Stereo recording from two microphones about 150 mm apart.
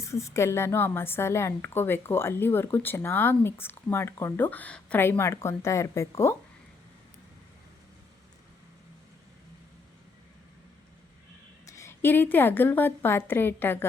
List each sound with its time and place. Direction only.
0.0 s a woman's voice: 20° left (ahead or behind)
11.6 s a woman's voice: 20° left (ahead or behind)